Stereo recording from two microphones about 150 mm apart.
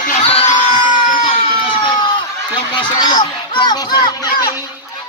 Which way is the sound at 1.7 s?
35° left (ahead or behind).